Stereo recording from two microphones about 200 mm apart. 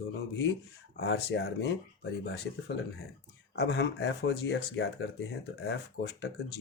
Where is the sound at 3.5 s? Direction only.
55° left (ahead or behind).